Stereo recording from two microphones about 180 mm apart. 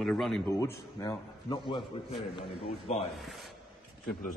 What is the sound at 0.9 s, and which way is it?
Speech, 25° left (ahead or behind).